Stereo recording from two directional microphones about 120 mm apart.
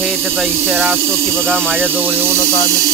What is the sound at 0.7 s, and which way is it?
Speech, 15° right (ahead or behind).